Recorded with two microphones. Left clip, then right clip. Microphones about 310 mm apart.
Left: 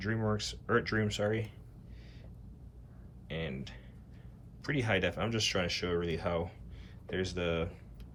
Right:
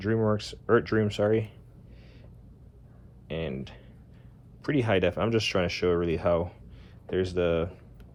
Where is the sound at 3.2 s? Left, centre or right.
Centre.